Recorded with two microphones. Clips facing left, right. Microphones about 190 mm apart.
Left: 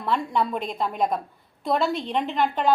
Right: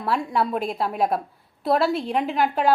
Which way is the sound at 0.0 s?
5° right (ahead or behind).